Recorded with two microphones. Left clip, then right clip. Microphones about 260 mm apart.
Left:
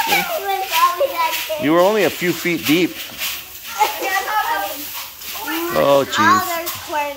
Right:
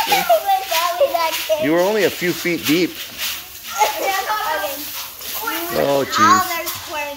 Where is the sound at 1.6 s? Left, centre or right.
Centre.